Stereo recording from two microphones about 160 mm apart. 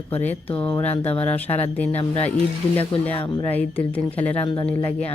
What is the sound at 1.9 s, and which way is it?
Speech, 40° left (ahead or behind).